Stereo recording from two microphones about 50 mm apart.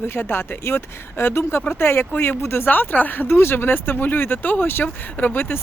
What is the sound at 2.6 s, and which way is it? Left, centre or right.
Speech, left.